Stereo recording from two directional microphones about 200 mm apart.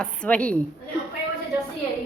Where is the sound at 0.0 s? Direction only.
5° left (ahead or behind).